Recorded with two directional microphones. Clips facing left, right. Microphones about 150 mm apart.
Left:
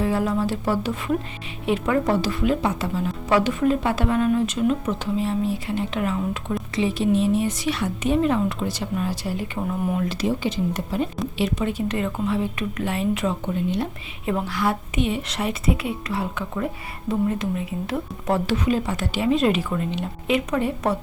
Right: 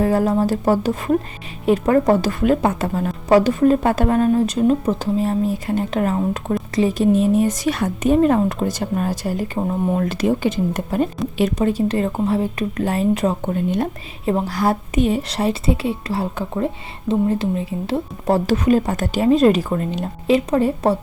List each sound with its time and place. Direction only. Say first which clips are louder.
0.0 s a woman's voice: right 5 dB; 40° right (ahead or behind)
9.6 s speech: right 5 dB; 30° right (ahead or behind)
10.0 s a woman's voice: right 5 dB; 50° right (ahead or behind)
14.3 s speech: right 5 dB; 35° right (ahead or behind)